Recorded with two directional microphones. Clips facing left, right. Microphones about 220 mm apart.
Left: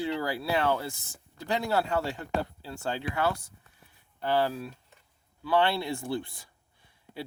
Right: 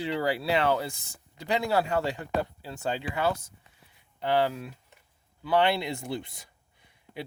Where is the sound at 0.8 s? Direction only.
15° right (ahead or behind).